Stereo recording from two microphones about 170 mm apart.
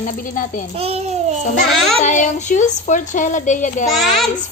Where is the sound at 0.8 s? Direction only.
35° right (ahead or behind).